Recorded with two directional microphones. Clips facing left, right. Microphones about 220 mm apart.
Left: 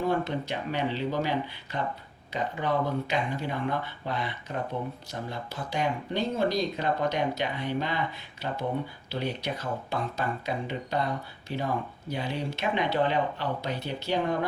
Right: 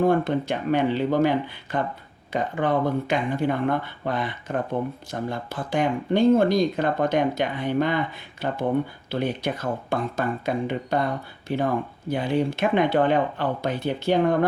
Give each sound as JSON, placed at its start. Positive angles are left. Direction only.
{"t": 0.0, "sound": "speech", "side_deg": -50}